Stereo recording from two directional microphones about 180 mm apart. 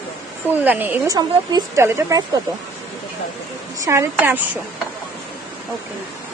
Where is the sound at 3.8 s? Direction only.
15° right (ahead or behind).